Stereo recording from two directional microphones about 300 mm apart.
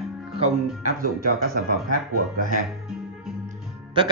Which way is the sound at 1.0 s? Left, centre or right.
Right.